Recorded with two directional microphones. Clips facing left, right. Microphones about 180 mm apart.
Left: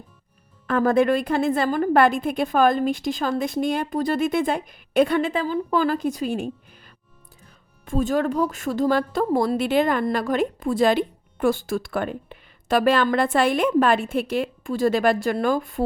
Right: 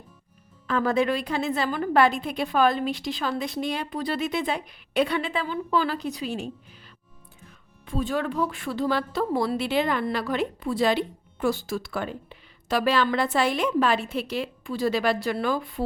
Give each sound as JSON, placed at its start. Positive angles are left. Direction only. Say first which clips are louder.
{"t": 0.7, "sound": "speech", "louder": "left 5 dB", "side_deg": 50}